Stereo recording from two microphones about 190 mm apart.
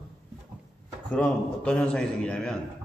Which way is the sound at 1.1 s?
5° left (ahead or behind).